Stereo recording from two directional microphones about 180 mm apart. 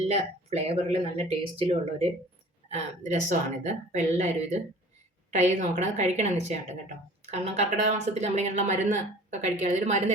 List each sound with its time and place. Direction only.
0.1 s speech: 35° right (ahead or behind)
5.3 s speech: 40° right (ahead or behind)